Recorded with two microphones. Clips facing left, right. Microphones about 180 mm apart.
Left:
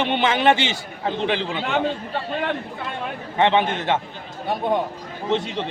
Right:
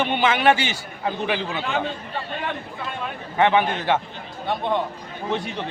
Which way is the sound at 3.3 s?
25° left (ahead or behind).